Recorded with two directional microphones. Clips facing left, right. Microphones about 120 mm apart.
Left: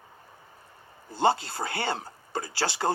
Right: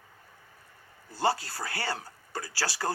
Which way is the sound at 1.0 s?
25° left (ahead or behind).